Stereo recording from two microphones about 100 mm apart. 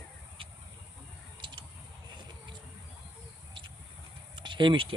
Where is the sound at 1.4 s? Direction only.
50° right (ahead or behind).